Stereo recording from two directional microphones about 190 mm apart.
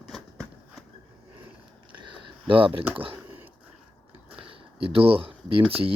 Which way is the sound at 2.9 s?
30° right (ahead or behind).